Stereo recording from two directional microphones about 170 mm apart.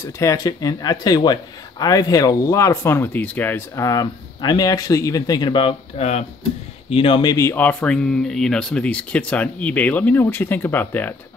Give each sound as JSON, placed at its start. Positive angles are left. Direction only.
{"t": 0.0, "sound": "a man's voice", "side_deg": 15}